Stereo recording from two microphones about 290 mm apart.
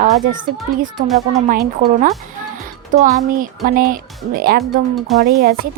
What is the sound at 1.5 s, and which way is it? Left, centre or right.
A woman's voice, right.